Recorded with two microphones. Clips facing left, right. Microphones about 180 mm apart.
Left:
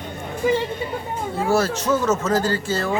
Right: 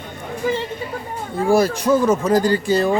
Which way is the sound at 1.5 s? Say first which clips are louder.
Right 5 dB; 15° right (ahead or behind).